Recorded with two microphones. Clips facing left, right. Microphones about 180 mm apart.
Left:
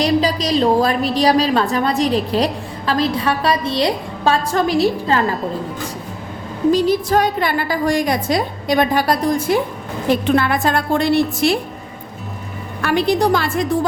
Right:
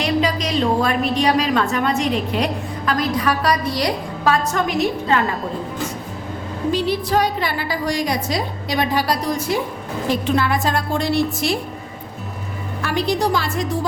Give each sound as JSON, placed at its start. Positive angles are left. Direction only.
{"t": 0.0, "sound": "a woman's voice", "side_deg": 35}
{"t": 6.7, "sound": "a woman's voice", "side_deg": 45}
{"t": 12.8, "sound": "a woman's voice", "side_deg": 60}